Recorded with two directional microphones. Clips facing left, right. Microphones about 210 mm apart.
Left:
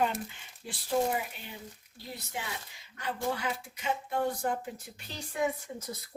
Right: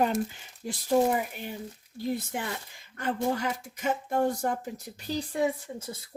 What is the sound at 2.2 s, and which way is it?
Speech, 50° right (ahead or behind).